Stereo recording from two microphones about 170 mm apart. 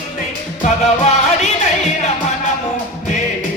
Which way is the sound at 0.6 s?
40° left (ahead or behind).